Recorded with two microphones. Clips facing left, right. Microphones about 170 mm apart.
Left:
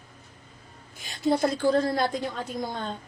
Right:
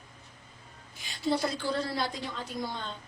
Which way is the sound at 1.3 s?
50° left (ahead or behind).